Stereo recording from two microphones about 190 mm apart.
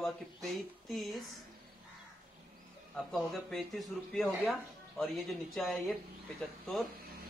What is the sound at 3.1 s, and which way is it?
Speech, centre (ahead or behind).